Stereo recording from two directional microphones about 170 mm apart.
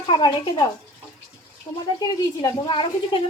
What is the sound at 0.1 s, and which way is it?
Speech, 25° left (ahead or behind).